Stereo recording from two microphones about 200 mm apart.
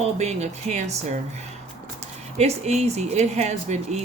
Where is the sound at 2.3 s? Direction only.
35° right (ahead or behind).